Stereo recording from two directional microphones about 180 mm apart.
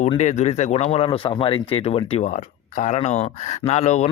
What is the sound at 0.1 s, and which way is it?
Speech, 40° left (ahead or behind).